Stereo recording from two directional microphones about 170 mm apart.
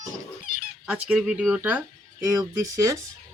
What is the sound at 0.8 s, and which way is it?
Speech, 5° right (ahead or behind).